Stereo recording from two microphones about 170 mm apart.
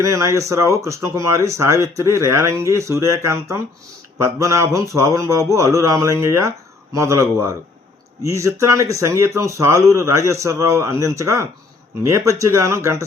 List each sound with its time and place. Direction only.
0.0 s speech: 15° right (ahead or behind)